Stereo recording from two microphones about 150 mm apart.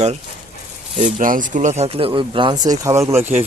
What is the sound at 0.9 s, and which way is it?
Speech, 60° right (ahead or behind).